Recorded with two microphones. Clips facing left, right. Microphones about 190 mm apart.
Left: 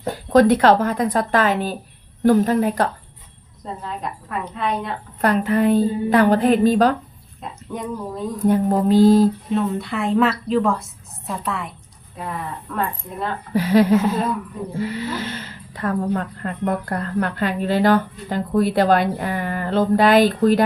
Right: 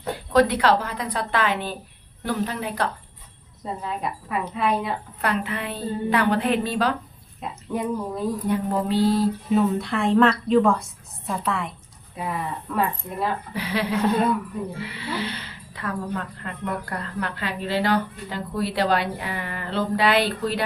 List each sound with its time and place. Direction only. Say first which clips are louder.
0.0 s speech: left 5 dB; 45° left (ahead or behind)
3.6 s a woman's voice: even; 5° right (ahead or behind)
5.2 s speech: left 10 dB; 40° left (ahead or behind)
7.7 s a woman's voice: right 2 dB; 5° right (ahead or behind)
8.4 s speech: left 10 dB; 45° left (ahead or behind)
9.5 s a woman's voice: right 1 dB; centre (ahead or behind)
13.5 s speech: left 11 dB; 45° left (ahead or behind)
13.9 s a woman's voice: left 3 dB; centre (ahead or behind)
14.8 s speech: left 5 dB; 45° left (ahead or behind)